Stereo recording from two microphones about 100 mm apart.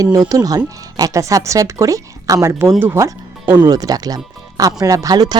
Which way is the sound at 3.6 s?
40° right (ahead or behind).